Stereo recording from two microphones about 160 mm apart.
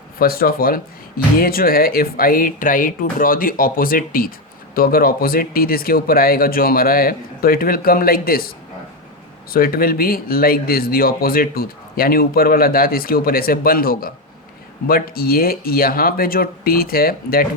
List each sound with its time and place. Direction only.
0.2 s a man's voice: 65° left (ahead or behind)